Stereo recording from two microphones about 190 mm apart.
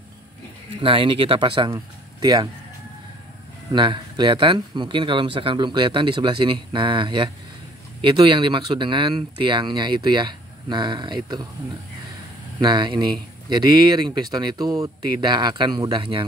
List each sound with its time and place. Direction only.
0.8 s speech: 25° right (ahead or behind)
3.7 s speech: 25° right (ahead or behind)
12.5 s speech: 25° right (ahead or behind)